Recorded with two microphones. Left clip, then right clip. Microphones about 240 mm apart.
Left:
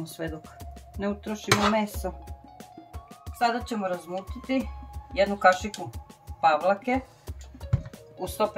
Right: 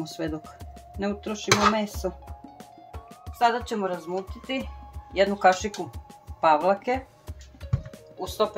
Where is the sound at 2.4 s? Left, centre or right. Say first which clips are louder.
Right 1 dB; centre.